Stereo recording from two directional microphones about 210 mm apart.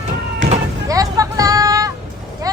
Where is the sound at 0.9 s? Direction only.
15° right (ahead or behind).